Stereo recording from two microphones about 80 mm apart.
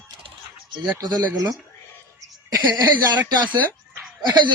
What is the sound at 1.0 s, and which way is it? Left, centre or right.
Speech, right.